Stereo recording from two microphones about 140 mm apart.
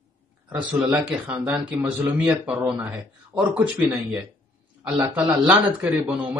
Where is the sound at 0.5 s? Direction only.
10° right (ahead or behind).